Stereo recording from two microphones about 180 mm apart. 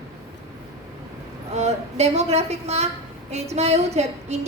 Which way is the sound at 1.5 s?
35° right (ahead or behind).